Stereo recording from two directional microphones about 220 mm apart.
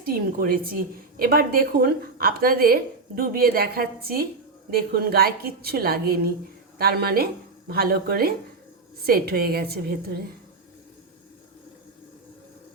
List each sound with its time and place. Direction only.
0.0 s a woman's voice: 40° right (ahead or behind)